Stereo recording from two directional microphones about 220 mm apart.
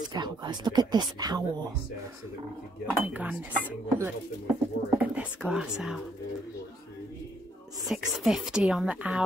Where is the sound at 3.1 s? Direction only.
5° right (ahead or behind).